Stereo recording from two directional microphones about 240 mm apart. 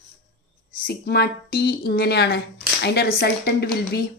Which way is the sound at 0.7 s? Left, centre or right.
Left.